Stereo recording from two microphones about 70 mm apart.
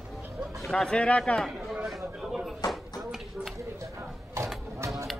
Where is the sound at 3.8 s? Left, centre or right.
Right.